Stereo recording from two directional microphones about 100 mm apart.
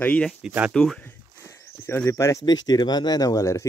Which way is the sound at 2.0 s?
30° left (ahead or behind).